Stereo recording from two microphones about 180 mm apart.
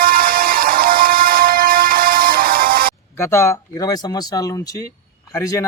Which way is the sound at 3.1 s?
15° left (ahead or behind).